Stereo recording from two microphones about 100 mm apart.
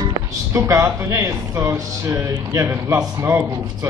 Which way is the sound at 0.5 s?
30° right (ahead or behind).